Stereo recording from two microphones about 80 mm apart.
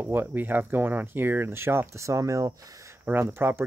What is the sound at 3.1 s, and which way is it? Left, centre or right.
Speech, right.